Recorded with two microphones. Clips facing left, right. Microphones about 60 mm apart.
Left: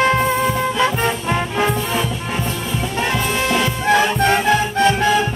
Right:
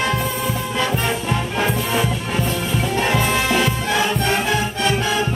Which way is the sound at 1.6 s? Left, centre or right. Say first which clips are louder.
Even; centre.